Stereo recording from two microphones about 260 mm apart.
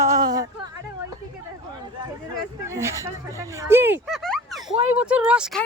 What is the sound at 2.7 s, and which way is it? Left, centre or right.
Speech, centre.